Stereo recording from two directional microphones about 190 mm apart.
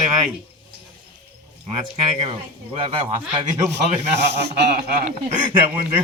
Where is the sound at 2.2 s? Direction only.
30° right (ahead or behind).